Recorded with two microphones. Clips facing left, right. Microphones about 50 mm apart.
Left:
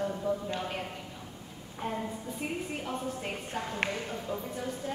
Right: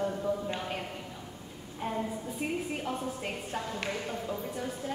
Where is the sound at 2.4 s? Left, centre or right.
Centre.